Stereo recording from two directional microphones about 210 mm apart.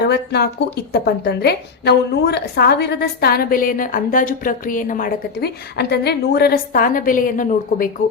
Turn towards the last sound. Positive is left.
turn(degrees=40)  # may be behind; listen again after turning